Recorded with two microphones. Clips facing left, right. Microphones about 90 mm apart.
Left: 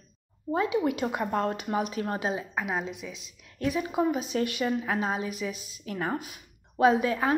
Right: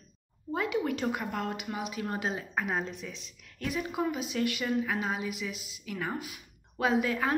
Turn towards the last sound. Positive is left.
turn(degrees=25)  # may be behind; listen again after turning